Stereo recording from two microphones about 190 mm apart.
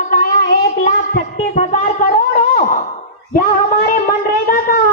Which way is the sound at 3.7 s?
45° left (ahead or behind).